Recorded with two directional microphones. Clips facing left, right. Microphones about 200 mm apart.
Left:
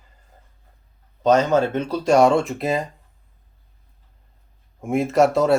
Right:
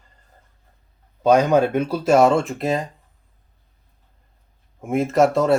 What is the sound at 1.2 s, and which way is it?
Speech, 10° right (ahead or behind).